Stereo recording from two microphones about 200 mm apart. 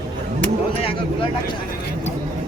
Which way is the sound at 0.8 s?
30° left (ahead or behind).